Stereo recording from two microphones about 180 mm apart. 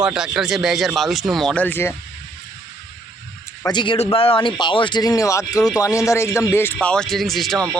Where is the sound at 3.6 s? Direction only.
25° left (ahead or behind).